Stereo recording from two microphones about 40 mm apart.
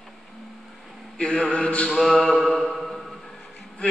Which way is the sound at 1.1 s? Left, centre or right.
Left.